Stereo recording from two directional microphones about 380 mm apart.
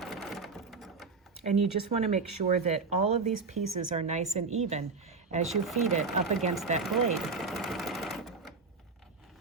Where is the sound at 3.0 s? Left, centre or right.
Right.